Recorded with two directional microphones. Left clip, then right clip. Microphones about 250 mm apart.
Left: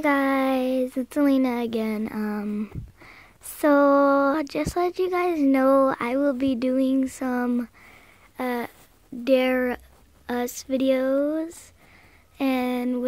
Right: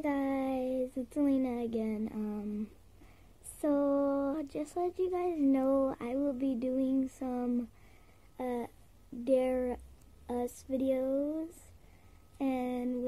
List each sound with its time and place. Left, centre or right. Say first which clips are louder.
0.0 s speech: left 12 dB; centre
12.4 s speech: left 10 dB; centre